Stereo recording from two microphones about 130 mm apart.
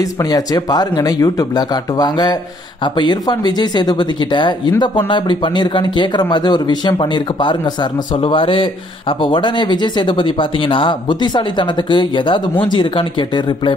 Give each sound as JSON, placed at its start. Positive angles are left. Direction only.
{"t": 0.2, "sound": "speech", "side_deg": 30}